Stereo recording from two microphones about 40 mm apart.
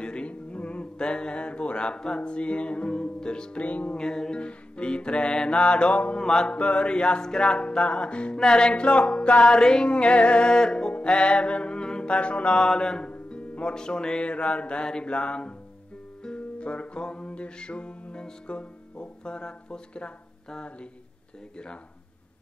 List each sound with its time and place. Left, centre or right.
0.0 s music: left
3.6 s music: left
3.9 s music: centre
6.1 s music: centre
6.5 s music: left
12.6 s music: centre